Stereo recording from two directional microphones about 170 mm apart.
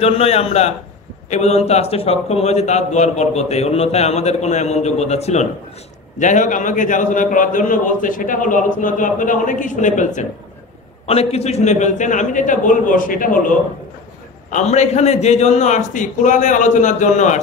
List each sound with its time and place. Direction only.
0.0 s a man's voice: 35° left (ahead or behind); by 13.6 s 55° left (ahead or behind)
14.5 s a man's voice: 40° left (ahead or behind)